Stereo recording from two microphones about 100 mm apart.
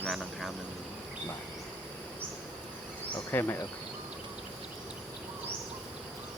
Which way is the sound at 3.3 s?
25° left (ahead or behind).